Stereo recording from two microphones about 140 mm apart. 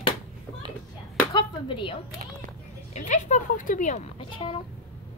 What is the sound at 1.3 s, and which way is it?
Chop, 35° left (ahead or behind).